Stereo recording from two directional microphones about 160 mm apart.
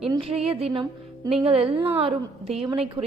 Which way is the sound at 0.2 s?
35° right (ahead or behind).